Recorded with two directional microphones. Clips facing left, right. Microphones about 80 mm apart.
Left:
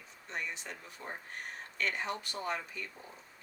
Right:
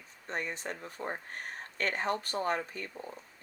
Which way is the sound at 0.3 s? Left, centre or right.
Right.